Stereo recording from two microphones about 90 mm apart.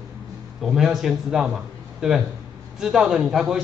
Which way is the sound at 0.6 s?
Centre (ahead or behind).